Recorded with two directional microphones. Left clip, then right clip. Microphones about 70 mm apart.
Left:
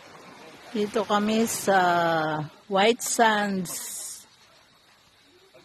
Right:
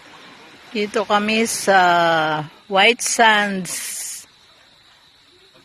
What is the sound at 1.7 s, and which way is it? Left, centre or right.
Speech, right.